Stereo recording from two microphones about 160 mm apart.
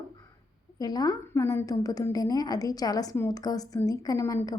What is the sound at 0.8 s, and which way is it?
A woman's voice, 25° left (ahead or behind).